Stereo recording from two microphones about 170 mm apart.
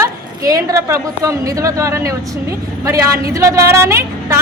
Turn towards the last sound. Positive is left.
turn(degrees=-15)  # may be behind; listen again after turning